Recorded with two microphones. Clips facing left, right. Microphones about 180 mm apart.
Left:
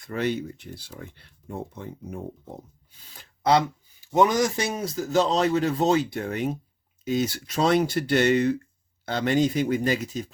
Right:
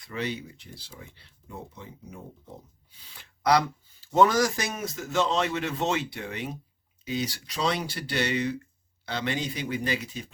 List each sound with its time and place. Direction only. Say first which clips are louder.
0.0 s speech: left 6 dB; 50° left (ahead or behind)
4.0 s a man's voice: left 1 dB; 15° left (ahead or behind); by 10.2 s 45° left (ahead or behind)